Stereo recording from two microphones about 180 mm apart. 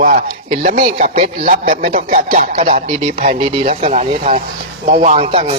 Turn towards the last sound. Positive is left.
turn(degrees=-30)  # may be behind; listen again after turning